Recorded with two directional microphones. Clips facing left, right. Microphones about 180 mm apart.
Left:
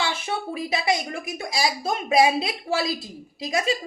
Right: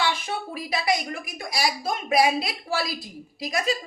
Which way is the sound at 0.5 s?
25° left (ahead or behind).